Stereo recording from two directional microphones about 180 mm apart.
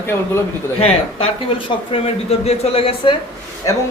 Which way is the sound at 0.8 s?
35° left (ahead or behind).